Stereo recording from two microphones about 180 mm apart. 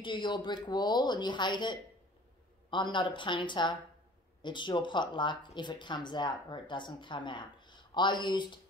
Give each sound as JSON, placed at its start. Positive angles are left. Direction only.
{"t": 0.0, "sound": "speech", "side_deg": 25}